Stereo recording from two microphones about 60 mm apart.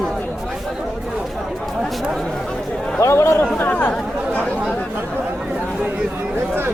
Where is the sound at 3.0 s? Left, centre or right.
Left.